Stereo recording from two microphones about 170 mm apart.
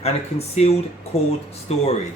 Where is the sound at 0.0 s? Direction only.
40° left (ahead or behind).